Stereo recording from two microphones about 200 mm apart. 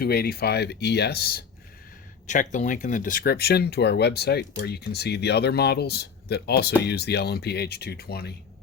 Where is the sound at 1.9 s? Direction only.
40° left (ahead or behind).